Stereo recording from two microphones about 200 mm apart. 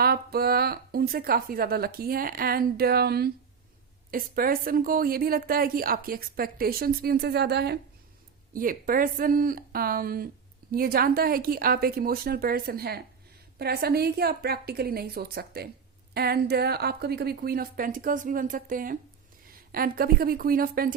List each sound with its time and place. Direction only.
0.0 s a woman's voice: 50° right (ahead or behind)